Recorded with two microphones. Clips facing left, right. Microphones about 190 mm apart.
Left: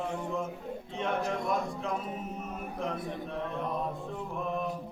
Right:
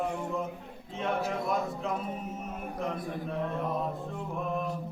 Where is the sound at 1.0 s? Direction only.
Centre (ahead or behind).